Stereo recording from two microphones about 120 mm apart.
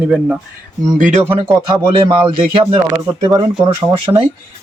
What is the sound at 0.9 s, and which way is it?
Speech, 85° right.